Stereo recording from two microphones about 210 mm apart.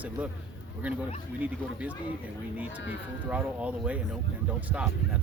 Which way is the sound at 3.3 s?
5° right (ahead or behind).